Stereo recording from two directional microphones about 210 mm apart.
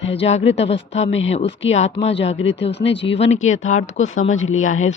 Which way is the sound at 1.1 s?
60° left (ahead or behind).